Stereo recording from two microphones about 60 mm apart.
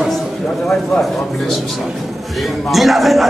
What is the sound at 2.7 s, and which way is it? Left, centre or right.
Speech, centre.